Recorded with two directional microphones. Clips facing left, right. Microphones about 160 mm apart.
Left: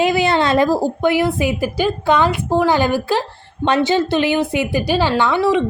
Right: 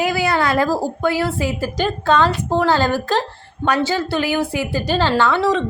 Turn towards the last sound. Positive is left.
turn(degrees=15)  # may be behind; listen again after turning